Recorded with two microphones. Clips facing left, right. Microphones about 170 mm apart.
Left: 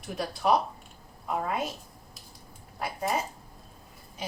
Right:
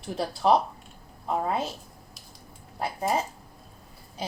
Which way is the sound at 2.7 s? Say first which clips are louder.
Right 3 dB; 30° right (ahead or behind).